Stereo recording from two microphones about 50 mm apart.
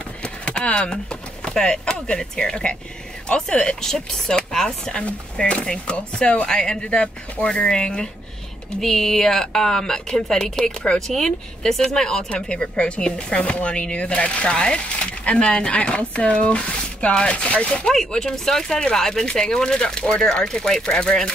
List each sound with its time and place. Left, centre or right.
0.2 s a sound: left
1.4 s speech: centre
5.0 s speech: left
6.8 s speech: left; by 12.3 s centre
12.3 s speech: left
17.9 s speech: centre